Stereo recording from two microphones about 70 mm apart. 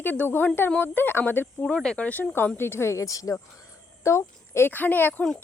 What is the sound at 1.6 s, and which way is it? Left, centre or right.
Speech, centre.